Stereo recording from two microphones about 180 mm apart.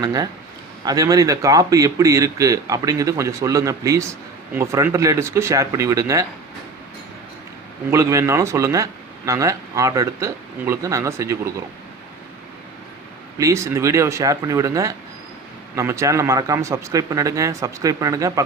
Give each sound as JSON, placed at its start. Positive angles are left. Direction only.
{"t": 0.0, "sound": "speech", "side_deg": -20}
{"t": 7.9, "sound": "speech", "side_deg": -15}
{"t": 13.4, "sound": "speech", "side_deg": -15}